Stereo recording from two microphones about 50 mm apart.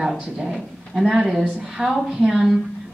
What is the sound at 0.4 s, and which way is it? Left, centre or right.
A woman's voice, centre.